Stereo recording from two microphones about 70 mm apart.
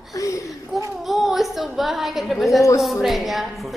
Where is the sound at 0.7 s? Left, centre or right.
Centre.